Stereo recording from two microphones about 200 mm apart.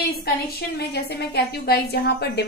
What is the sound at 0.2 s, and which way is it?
A woman's voice, 50° left (ahead or behind).